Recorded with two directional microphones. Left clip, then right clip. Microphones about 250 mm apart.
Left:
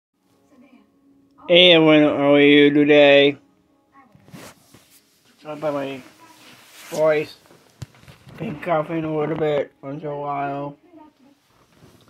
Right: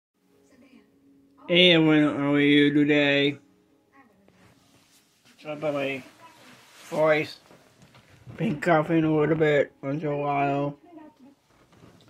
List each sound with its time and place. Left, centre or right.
1.4 s speech: centre
5.4 s speech: centre
8.4 s speech: right